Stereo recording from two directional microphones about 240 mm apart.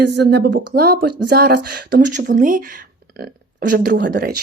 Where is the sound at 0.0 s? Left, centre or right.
Right.